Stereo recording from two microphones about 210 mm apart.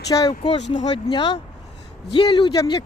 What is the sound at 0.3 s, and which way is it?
Speech, 30° left (ahead or behind).